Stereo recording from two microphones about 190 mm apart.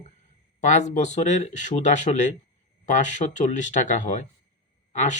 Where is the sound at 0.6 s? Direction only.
40° left (ahead or behind).